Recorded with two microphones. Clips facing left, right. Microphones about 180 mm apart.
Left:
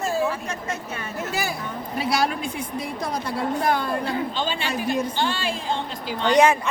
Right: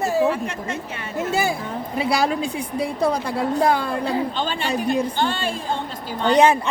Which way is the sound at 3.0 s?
35° right (ahead or behind).